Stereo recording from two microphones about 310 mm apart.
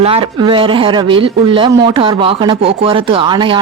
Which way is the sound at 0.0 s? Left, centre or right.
Centre.